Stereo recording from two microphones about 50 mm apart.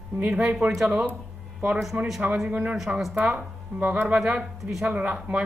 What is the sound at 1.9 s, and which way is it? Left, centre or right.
Speech, right.